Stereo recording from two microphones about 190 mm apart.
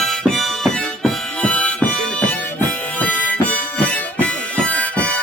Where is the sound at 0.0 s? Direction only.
Centre (ahead or behind).